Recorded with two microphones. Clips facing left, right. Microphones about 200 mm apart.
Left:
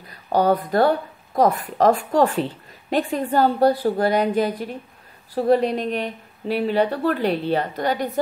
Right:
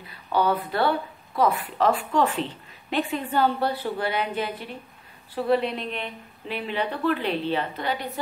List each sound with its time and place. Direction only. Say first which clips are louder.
0.0 s a woman's voice: left 4 dB; 45° left (ahead or behind)